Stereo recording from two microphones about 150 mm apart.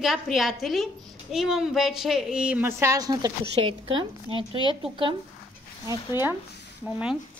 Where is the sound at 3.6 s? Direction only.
35° right (ahead or behind).